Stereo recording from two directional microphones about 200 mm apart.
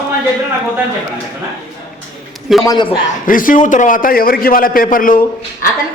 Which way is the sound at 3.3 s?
45° left (ahead or behind).